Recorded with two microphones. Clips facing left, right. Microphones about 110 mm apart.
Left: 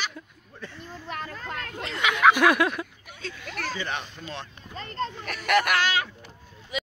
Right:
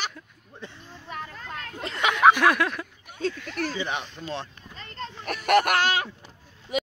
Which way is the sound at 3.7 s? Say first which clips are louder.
Right 2 dB; 15° right (ahead or behind).